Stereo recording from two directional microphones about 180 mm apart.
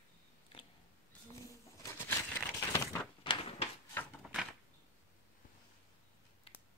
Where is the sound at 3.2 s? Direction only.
30° left (ahead or behind).